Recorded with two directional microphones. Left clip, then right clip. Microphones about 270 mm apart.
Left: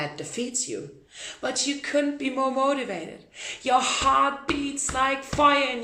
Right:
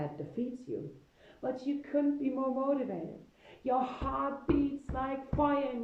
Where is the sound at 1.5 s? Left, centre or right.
Centre.